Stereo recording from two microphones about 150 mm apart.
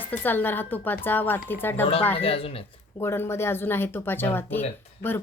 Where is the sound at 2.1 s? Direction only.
40° left (ahead or behind).